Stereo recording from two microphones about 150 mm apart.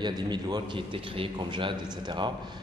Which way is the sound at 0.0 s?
30° right (ahead or behind).